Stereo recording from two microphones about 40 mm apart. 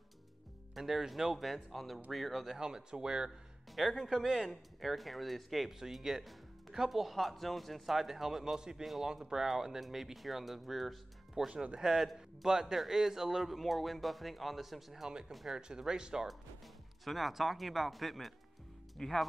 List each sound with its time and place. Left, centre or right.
0.7 s speech: centre
2.5 s speech: centre
4.0 s speech: centre
11.3 s speech: right
11.9 s a man's voice: centre
15.0 s speech: centre
17.0 s speech: centre
19.0 s speech: centre